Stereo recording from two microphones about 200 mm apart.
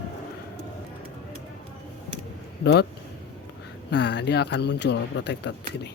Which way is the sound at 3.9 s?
60° left (ahead or behind).